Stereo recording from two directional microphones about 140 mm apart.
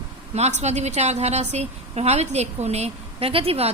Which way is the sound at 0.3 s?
55° right (ahead or behind).